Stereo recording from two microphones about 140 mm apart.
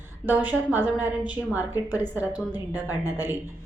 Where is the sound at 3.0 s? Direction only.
15° right (ahead or behind).